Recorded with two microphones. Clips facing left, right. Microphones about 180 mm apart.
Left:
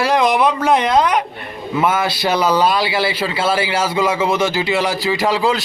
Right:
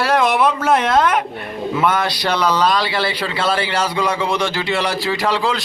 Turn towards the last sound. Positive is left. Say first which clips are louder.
# left 2 dB
turn(degrees=5)  # may be behind; listen again after turning